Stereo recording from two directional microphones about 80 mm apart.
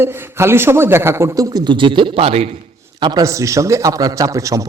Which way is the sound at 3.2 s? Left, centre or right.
Right.